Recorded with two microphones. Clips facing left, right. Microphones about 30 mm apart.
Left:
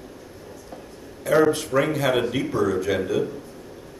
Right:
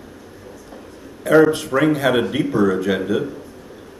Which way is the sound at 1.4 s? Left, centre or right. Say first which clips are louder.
Right 4 dB; right.